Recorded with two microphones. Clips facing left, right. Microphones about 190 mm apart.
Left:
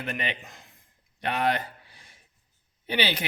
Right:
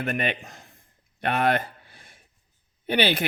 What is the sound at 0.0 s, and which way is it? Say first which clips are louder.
Speech: right 6 dB; 50° right (ahead or behind).